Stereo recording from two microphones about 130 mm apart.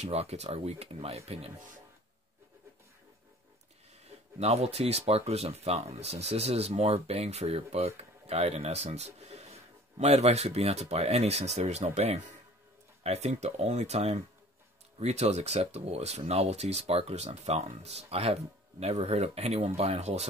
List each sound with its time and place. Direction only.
0.0 s speech: 55° right (ahead or behind)
4.4 s speech: 55° right (ahead or behind)